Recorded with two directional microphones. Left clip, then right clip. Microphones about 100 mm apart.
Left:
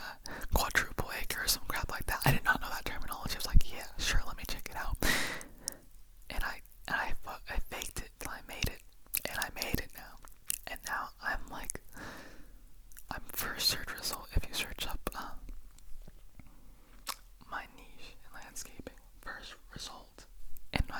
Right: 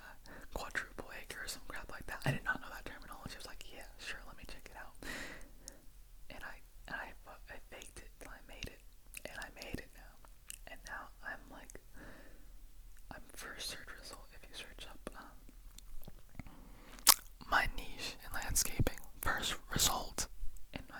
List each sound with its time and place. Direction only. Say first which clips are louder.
0.0 s whispering: left 10 dB; 30° left (ahead or behind)
16.4 s chewing: right 7 dB; 25° right (ahead or behind)
20.7 s whispering: left 13 dB; 35° left (ahead or behind)